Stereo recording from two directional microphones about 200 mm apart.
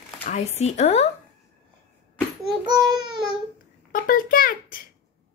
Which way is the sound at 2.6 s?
20° right (ahead or behind).